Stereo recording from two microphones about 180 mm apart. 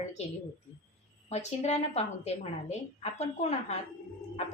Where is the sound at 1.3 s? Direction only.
40° left (ahead or behind).